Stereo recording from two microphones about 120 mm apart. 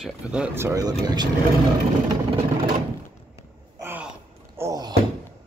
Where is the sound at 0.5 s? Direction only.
25° right (ahead or behind).